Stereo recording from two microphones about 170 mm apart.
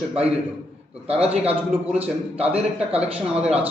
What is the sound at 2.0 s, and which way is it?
A man's voice, 10° right (ahead or behind).